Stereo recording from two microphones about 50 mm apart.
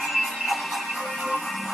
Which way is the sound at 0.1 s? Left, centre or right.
Centre.